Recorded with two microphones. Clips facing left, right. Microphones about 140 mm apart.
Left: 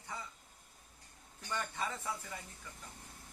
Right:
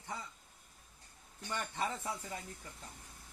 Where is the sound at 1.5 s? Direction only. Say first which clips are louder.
Right 1 dB; 25° right (ahead or behind).